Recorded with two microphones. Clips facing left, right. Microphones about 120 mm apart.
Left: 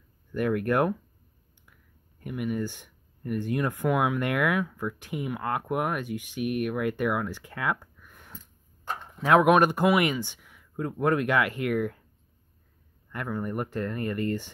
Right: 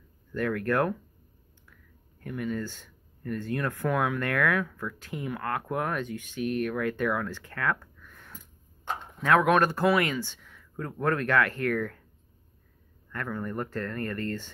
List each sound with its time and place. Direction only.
0.3 s speech: 15° left (ahead or behind)
13.1 s speech: 15° left (ahead or behind)